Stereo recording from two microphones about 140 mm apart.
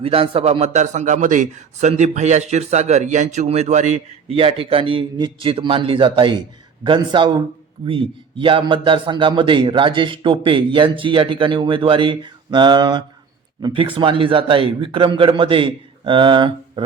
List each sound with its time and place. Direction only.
0.0 s a man's voice: 45° right (ahead or behind)
4.3 s a man's voice: 40° right (ahead or behind)